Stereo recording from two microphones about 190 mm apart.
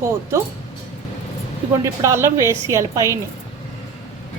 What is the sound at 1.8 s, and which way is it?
A woman's voice, 15° right (ahead or behind).